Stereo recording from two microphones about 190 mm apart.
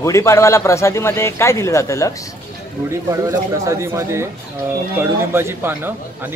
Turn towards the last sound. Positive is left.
turn(degrees=-10)  # may be behind; listen again after turning